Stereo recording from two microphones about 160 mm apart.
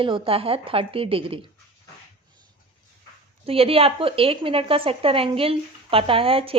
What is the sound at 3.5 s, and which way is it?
A woman's voice, 35° right (ahead or behind).